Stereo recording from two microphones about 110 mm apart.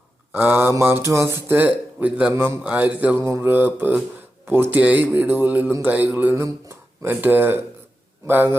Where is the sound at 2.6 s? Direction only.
10° right (ahead or behind).